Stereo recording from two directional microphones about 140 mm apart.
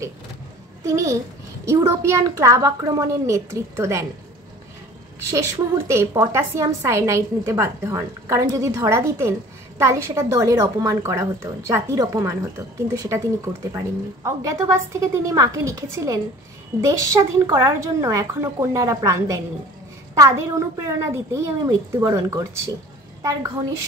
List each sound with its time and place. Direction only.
0.8 s a woman's voice: 25° right (ahead or behind)
5.3 s a woman's voice: 20° right (ahead or behind)